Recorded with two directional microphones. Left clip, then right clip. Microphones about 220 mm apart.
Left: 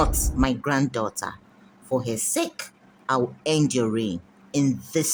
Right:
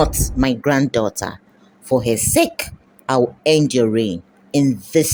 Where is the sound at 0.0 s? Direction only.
20° right (ahead or behind).